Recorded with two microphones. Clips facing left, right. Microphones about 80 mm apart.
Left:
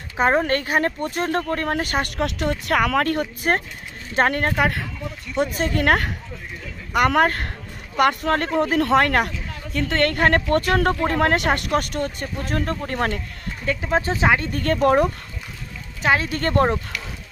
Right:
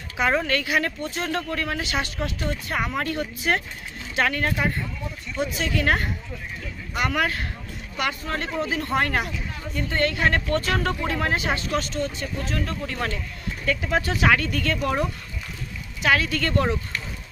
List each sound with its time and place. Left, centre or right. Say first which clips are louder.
0.2 s a woman's voice: left 4 dB; left
9.8 s speech: left 4 dB; left
13.7 s speech: left 2 dB; left
14.5 s speech: left 7 dB; left
16.0 s speech: left 2 dB; left